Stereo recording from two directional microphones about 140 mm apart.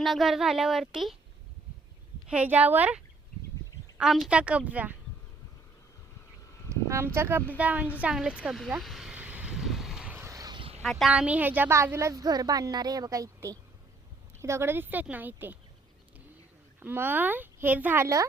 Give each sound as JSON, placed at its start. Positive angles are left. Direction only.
{"t": 0.0, "sound": "speech", "side_deg": 0}
{"t": 2.2, "sound": "speech", "side_deg": -10}
{"t": 6.8, "sound": "speech", "side_deg": -20}
{"t": 8.8, "sound": "vehicle", "side_deg": 0}
{"t": 10.2, "sound": "vehicle", "side_deg": -20}
{"t": 10.6, "sound": "a sound", "side_deg": -45}
{"t": 10.8, "sound": "a woman's voice", "side_deg": 0}
{"t": 16.8, "sound": "speech", "side_deg": -15}